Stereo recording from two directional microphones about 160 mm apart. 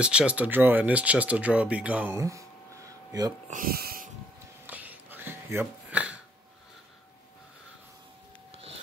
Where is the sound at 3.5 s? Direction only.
65° right (ahead or behind).